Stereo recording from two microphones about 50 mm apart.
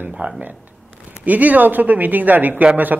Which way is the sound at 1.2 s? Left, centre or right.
Right.